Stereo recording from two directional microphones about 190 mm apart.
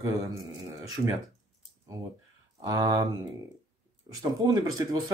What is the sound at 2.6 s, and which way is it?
Speech, 20° right (ahead or behind).